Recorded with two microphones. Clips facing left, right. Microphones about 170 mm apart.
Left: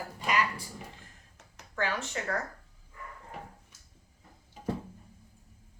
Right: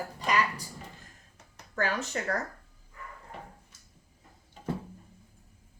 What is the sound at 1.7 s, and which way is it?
Speech, 40° right (ahead or behind).